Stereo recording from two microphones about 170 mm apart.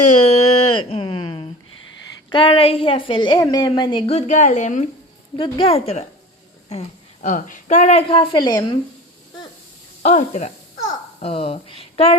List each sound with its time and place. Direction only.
0.1 s a sound: 35° left (ahead or behind)
2.3 s a woman's voice: 30° left (ahead or behind)
10.0 s a woman's voice: 40° left (ahead or behind)